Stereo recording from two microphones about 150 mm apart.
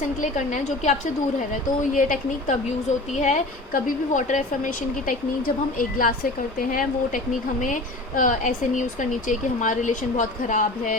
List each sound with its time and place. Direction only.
0.0 s a woman's voice: 55° left (ahead or behind)